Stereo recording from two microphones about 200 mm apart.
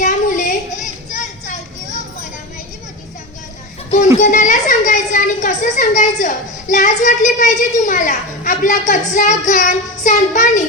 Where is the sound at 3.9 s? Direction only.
40° left (ahead or behind).